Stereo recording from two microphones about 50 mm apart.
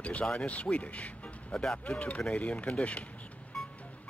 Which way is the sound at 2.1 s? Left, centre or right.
Left.